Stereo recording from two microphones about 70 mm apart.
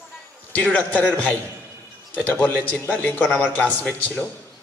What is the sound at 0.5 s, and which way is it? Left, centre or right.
A man's voice, left.